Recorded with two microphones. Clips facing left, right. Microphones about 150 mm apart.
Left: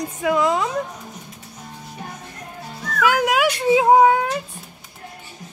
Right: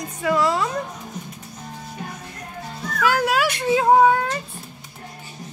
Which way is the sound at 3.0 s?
15° left (ahead or behind).